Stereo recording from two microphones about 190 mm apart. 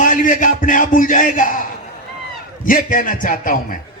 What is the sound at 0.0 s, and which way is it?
Music, 45° left (ahead or behind).